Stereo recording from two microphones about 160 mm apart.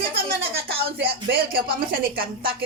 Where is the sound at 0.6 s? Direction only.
75° right (ahead or behind).